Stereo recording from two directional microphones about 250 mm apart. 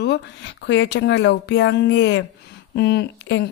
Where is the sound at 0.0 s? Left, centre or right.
Left.